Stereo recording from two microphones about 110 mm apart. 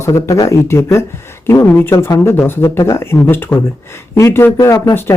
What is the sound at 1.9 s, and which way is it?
Speech, 30° left (ahead or behind).